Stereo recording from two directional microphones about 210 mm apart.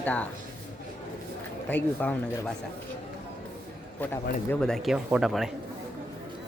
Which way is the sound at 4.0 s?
10° left (ahead or behind).